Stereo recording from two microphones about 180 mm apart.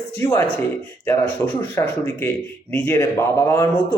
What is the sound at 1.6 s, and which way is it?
A man's voice, 15° left (ahead or behind).